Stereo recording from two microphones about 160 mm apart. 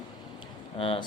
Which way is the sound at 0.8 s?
35° left (ahead or behind).